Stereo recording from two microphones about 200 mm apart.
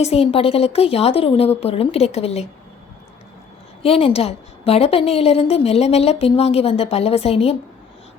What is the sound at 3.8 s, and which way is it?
A woman's voice, 30° left (ahead or behind).